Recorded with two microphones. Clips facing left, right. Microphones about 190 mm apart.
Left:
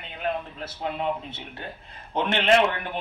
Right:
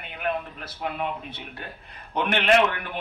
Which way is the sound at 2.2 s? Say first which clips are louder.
Even; 25° left (ahead or behind).